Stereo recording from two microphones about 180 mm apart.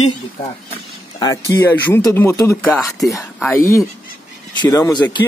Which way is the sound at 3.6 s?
15° left (ahead or behind).